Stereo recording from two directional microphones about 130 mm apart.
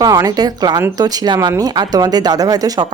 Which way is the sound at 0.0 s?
30° right (ahead or behind).